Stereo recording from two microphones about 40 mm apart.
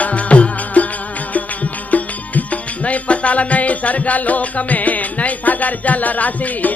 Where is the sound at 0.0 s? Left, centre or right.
Left.